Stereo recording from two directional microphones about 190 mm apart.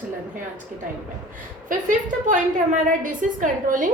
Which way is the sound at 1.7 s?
45° right (ahead or behind).